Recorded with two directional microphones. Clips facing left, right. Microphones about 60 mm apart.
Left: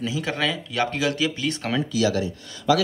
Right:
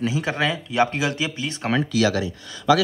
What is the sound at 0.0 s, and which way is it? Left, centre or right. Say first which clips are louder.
A man's voice: right 2 dB; right.